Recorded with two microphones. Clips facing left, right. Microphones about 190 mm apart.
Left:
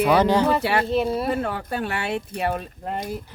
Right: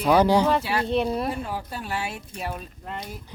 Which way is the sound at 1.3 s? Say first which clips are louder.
Left 6 dB; 70° left (ahead or behind).